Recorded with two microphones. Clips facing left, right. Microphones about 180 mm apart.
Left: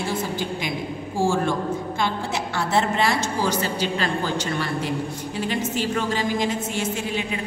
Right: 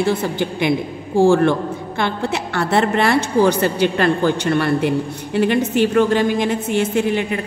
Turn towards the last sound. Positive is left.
turn(degrees=-60)  # may be behind; listen again after turning